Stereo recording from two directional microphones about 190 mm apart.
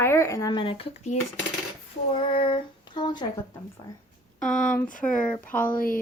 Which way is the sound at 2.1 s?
30° left (ahead or behind).